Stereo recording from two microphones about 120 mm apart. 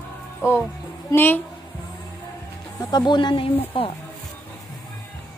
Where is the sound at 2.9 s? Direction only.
40° left (ahead or behind).